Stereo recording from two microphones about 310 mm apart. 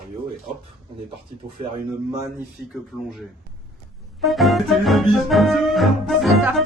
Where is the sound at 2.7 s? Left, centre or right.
Centre.